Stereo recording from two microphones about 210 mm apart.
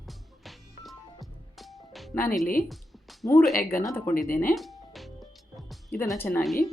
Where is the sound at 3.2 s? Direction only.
10° left (ahead or behind).